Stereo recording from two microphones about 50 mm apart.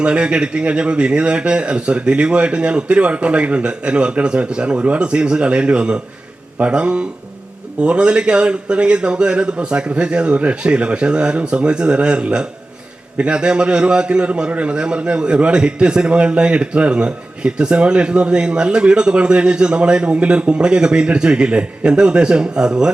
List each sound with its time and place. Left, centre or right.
0.0 s a man's voice: right